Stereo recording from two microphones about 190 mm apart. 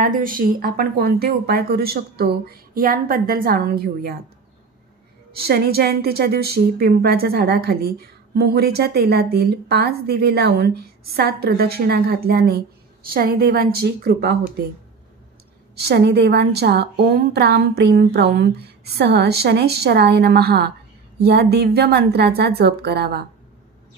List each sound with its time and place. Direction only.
0.0 s speech: 45° right (ahead or behind)
5.3 s a woman's voice: 55° right (ahead or behind)
15.7 s a woman's voice: 60° right (ahead or behind)